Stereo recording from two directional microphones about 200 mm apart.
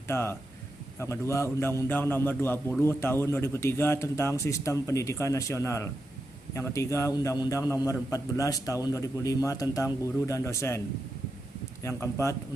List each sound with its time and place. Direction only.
0.1 s a man's voice: 10° left (ahead or behind)
11.8 s a man's voice: 15° left (ahead or behind)